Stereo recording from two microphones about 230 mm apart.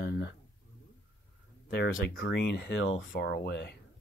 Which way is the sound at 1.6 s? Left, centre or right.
Left.